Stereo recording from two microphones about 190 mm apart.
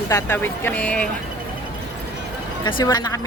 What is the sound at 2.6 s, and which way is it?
Speech, 25° left (ahead or behind).